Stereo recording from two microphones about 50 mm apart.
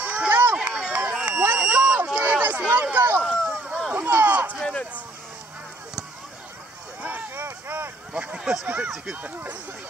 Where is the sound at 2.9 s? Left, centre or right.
Right.